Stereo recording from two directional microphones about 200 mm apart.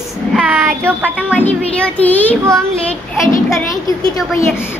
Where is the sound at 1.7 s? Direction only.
5° left (ahead or behind).